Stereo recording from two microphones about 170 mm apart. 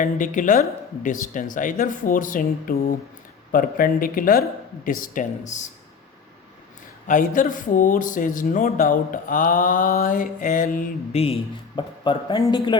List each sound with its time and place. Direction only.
0.0 s speech: 50° left (ahead or behind)
7.1 s speech: 50° left (ahead or behind)
11.1 s speech: 35° left (ahead or behind)